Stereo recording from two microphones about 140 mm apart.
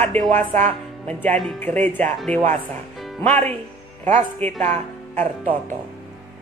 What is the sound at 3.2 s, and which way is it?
Speech, 10° left (ahead or behind).